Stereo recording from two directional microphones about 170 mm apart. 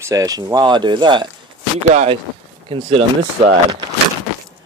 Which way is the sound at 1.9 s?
40° right (ahead or behind).